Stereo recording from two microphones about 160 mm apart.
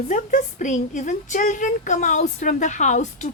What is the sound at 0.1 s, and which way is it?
A woman's voice, 50° left (ahead or behind).